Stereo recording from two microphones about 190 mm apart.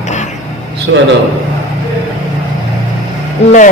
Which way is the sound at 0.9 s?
80° right.